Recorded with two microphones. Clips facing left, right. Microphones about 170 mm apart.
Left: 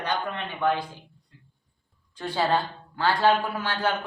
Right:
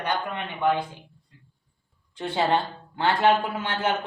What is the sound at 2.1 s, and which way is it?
A man's voice, 25° right (ahead or behind).